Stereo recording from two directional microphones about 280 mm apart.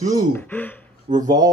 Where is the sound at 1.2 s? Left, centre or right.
Centre.